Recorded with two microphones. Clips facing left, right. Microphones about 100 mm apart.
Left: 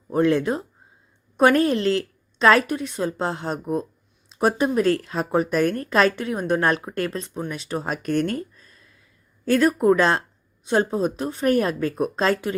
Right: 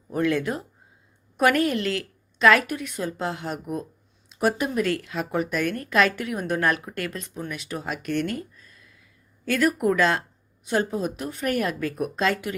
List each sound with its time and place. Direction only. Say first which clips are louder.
0.1 s a woman's voice: left 4 dB; 30° left (ahead or behind)